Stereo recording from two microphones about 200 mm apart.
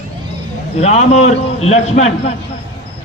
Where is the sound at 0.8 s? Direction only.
35° left (ahead or behind).